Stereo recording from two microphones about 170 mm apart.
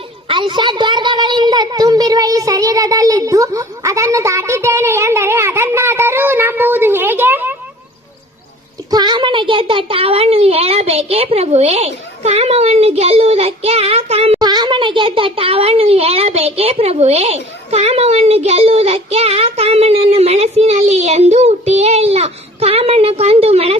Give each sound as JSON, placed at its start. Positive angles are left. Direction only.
{"t": 0.3, "sound": "a sound", "side_deg": -30}
{"t": 8.9, "sound": "a child's voice", "side_deg": -25}
{"t": 14.3, "sound": "a child's voice", "side_deg": -25}